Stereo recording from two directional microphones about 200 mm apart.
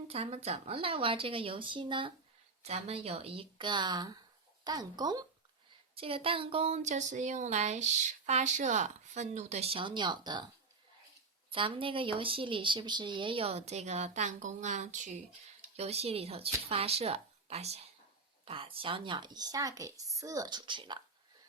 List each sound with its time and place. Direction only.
0.1 s speech: 30° right (ahead or behind)
11.5 s speech: 25° right (ahead or behind)